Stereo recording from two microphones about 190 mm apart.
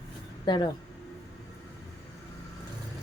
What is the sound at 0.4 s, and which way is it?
Speech, 25° left (ahead or behind).